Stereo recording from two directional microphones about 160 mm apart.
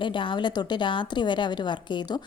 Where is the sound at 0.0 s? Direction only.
30° left (ahead or behind).